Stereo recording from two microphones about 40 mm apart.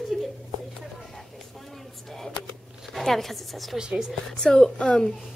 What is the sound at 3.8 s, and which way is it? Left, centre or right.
Speech, centre.